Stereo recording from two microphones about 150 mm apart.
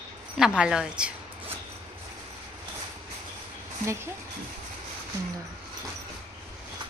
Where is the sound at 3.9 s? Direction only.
15° right (ahead or behind).